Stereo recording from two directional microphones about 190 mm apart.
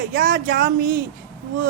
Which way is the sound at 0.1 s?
45° right (ahead or behind).